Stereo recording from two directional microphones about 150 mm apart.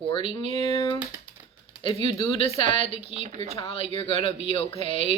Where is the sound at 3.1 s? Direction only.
45° right (ahead or behind).